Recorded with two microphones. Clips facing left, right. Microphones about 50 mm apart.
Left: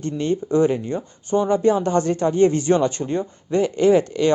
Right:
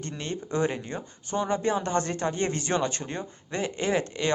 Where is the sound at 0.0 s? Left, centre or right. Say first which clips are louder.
Left 11 dB; right.